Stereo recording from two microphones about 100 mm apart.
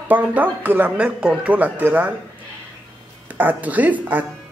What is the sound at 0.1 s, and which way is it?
Speech, 15° right (ahead or behind).